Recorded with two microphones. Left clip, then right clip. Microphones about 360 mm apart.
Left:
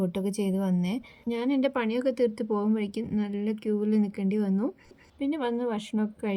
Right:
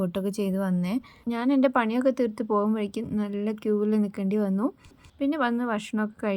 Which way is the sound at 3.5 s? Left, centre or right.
Right.